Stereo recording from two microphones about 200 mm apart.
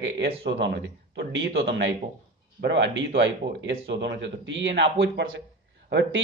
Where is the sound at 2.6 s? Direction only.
60° right (ahead or behind).